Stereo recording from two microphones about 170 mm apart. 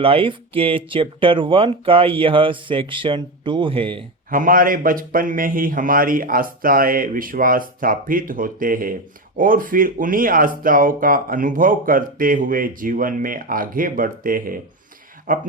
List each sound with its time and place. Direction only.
0.0 s speech: 30° right (ahead or behind)
4.3 s speech: 55° right (ahead or behind)